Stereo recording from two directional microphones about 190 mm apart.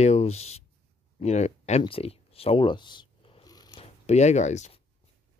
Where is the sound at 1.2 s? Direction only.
35° left (ahead or behind).